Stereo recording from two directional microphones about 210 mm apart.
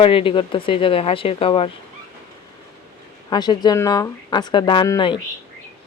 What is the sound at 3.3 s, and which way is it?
Speech, 20° left (ahead or behind).